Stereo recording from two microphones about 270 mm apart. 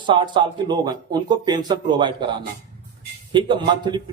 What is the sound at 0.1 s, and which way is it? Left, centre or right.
A man's voice, centre.